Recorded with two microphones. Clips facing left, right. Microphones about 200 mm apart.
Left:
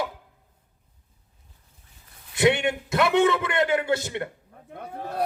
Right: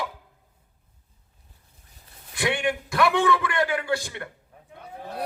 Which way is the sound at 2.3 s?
25° left (ahead or behind).